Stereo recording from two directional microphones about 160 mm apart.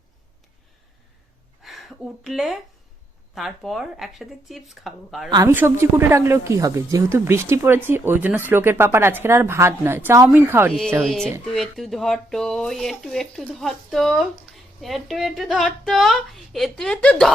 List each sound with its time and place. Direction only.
1.6 s speech: centre (ahead or behind)
5.3 s speech: 20° right (ahead or behind)
10.7 s speech: 5° left (ahead or behind)